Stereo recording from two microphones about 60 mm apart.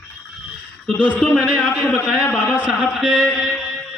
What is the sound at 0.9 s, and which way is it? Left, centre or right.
Speech, left.